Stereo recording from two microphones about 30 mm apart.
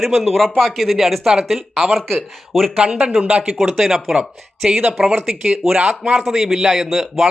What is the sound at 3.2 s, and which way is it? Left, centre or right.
Speech, right.